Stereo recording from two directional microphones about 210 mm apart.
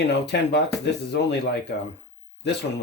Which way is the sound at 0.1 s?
55° left (ahead or behind).